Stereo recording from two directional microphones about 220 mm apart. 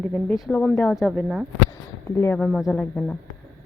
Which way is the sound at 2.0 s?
10° left (ahead or behind).